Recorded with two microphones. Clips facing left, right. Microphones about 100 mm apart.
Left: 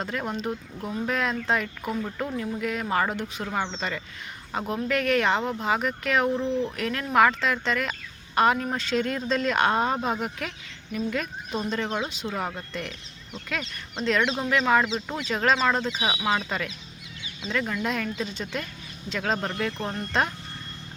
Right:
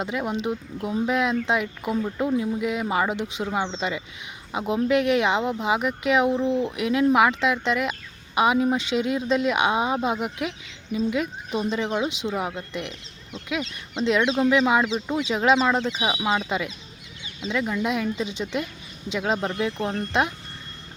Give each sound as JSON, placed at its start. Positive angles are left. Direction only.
{"t": 0.0, "sound": "speech", "side_deg": -15}
{"t": 14.0, "sound": "speech", "side_deg": -15}